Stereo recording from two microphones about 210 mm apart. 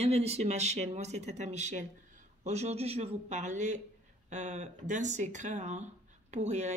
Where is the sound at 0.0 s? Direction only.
30° right (ahead or behind).